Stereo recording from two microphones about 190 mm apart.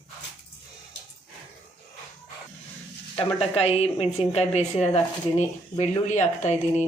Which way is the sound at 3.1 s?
30° left (ahead or behind).